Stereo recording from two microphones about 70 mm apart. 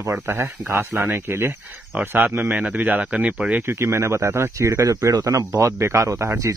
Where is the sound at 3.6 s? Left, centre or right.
Right.